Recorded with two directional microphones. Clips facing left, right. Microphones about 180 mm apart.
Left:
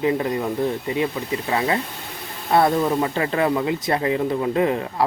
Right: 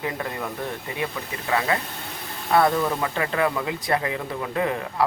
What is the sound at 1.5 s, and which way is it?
Speech, 25° left (ahead or behind).